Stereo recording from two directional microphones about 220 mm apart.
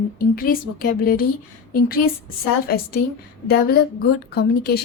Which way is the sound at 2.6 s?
45° left (ahead or behind).